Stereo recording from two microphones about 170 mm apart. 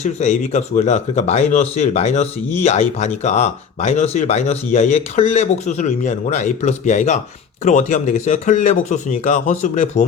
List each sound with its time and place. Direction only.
0.0 s speech: 45° left (ahead or behind)